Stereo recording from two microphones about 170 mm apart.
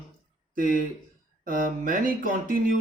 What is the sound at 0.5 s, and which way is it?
A man's voice, 55° right (ahead or behind).